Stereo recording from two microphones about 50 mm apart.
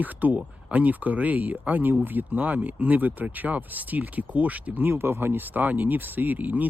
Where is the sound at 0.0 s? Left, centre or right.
Right.